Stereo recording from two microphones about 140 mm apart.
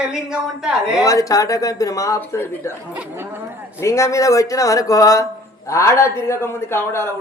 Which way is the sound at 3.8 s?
20° left (ahead or behind).